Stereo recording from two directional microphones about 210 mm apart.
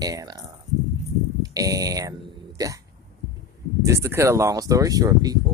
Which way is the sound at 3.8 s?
15° right (ahead or behind).